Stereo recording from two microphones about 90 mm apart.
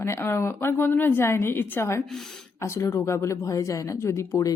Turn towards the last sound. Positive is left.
turn(degrees=35)  # may be behind; listen again after turning